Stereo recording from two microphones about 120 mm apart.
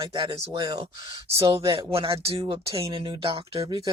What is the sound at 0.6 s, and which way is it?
Speech, 35° right (ahead or behind).